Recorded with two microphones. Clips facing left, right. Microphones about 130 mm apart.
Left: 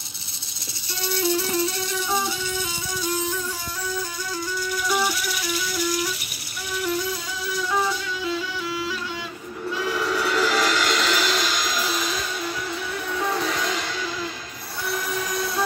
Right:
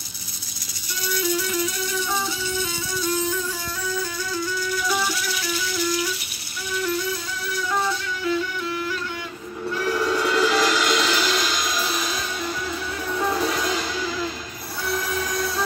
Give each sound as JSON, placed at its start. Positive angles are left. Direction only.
{"t": 1.0, "sound": "music", "side_deg": 30}
{"t": 9.8, "sound": "music", "side_deg": 0}